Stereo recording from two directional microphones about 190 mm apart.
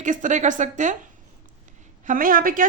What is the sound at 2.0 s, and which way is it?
Speech, 45° right (ahead or behind).